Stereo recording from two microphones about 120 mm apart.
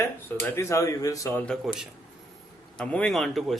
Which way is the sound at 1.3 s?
10° left (ahead or behind).